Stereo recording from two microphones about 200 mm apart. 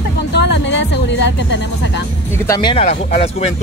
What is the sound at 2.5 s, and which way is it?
Speech, 20° left (ahead or behind).